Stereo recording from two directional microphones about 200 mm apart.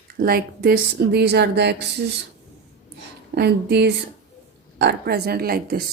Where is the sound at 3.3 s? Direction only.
55° right (ahead or behind).